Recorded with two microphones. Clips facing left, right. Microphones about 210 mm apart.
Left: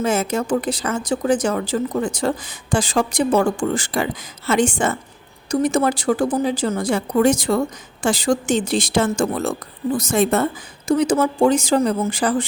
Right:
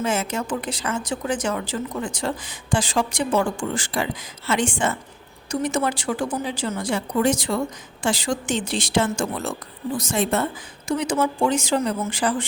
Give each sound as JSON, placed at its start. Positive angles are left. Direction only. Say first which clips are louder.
{"t": 0.0, "sound": "speech", "louder": "left 4 dB", "side_deg": 40}